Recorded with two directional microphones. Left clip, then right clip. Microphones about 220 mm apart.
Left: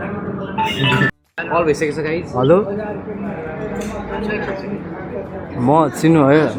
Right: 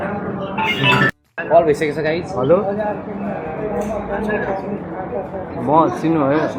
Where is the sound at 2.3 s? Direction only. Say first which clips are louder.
Left 2 dB; 55° left (ahead or behind).